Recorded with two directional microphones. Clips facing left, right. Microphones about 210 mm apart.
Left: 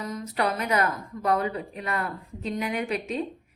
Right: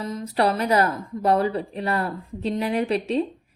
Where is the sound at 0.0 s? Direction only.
30° right (ahead or behind).